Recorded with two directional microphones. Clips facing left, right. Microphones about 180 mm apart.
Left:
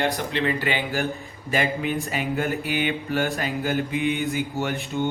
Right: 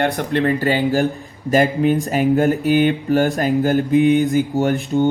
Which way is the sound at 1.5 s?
40° right (ahead or behind).